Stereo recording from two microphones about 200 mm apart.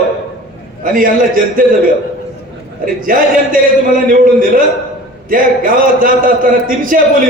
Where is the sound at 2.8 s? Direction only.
45° right (ahead or behind).